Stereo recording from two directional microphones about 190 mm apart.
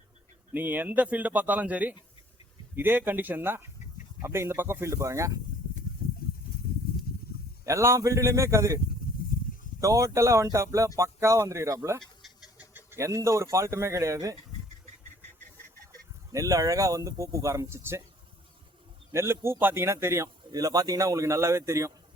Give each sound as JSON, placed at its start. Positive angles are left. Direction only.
{"t": 0.5, "sound": "speech", "side_deg": -10}
{"t": 7.1, "sound": "snake", "side_deg": 55}
{"t": 7.6, "sound": "speech", "side_deg": -15}
{"t": 9.8, "sound": "speech", "side_deg": -15}
{"t": 12.2, "sound": "speech", "side_deg": -5}
{"t": 16.3, "sound": "speech", "side_deg": -15}
{"t": 19.1, "sound": "speech", "side_deg": -15}